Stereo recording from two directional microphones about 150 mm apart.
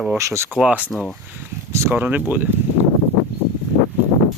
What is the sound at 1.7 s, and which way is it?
Speech, 15° right (ahead or behind).